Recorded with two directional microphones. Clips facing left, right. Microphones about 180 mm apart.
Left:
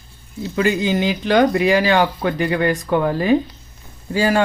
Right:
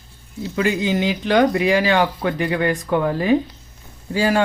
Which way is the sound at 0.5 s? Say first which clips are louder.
Left 2 dB; 40° left (ahead or behind).